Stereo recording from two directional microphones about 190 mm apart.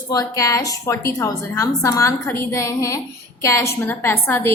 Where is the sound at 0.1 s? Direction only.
15° left (ahead or behind).